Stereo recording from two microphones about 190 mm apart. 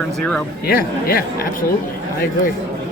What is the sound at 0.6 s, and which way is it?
Speech, 50° left (ahead or behind).